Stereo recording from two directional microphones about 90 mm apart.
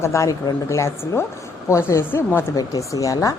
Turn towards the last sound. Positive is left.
turn(degrees=40)  # may be behind; listen again after turning